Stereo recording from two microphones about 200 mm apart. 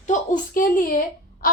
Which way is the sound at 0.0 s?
40° left (ahead or behind).